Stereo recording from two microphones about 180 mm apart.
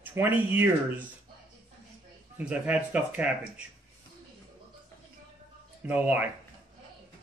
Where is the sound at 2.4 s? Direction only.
5° right (ahead or behind).